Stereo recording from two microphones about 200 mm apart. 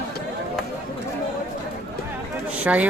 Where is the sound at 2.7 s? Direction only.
5° right (ahead or behind).